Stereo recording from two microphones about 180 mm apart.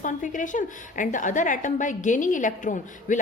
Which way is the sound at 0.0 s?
45° left (ahead or behind).